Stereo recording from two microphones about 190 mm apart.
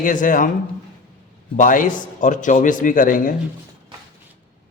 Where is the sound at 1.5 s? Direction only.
45° left (ahead or behind).